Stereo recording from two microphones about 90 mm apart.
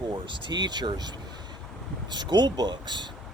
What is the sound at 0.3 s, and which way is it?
Speech, 60° right (ahead or behind).